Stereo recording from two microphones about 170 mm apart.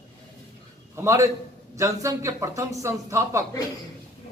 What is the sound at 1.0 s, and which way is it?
Speech, 15° right (ahead or behind).